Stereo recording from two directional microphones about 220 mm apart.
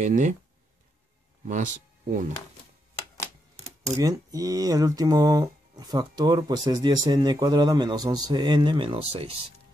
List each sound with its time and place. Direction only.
0.0 s speech: 35° right (ahead or behind)
1.4 s speech: 35° right (ahead or behind)
3.5 s a sound: 30° right (ahead or behind)
4.0 s speech: 15° right (ahead or behind)